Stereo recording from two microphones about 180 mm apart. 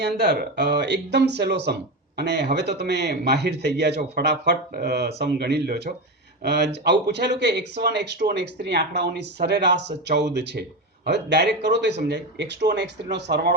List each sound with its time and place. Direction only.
0.0 s speech: 65° right (ahead or behind)